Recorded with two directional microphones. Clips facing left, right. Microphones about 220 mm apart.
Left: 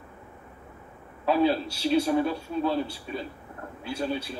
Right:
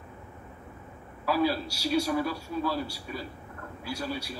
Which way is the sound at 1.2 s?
25° left (ahead or behind).